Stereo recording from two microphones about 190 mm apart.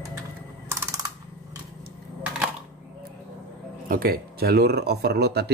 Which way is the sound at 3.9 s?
55° right (ahead or behind).